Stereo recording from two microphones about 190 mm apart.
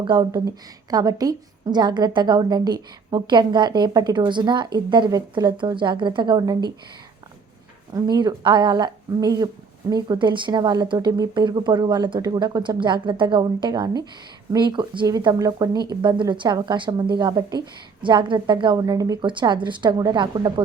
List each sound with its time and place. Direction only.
0.0 s a woman's voice: 25° right (ahead or behind)
7.9 s a woman's voice: 20° right (ahead or behind)